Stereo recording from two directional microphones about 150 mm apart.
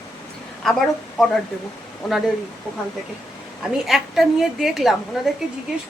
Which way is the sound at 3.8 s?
Centre (ahead or behind).